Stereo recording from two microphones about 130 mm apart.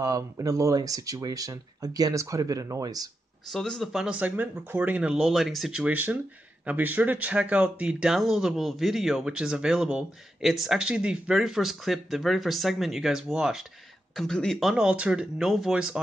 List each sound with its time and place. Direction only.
0.0 s speech: 25° right (ahead or behind)
3.5 s speech: centre (ahead or behind)